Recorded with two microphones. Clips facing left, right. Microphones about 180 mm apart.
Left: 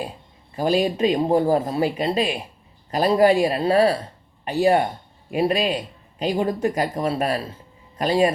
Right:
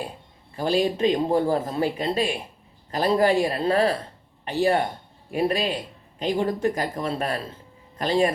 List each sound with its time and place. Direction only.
0.5 s speech: 15° left (ahead or behind)
5.3 s speech: 20° left (ahead or behind)